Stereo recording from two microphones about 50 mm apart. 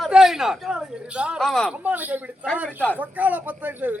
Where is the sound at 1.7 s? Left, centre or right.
Right.